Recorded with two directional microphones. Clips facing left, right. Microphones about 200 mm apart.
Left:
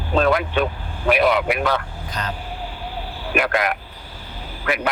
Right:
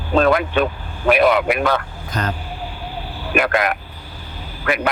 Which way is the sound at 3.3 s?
55° right (ahead or behind).